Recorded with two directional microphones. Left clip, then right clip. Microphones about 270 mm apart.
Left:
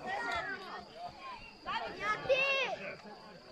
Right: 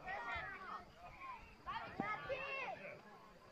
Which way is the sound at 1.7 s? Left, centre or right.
Left.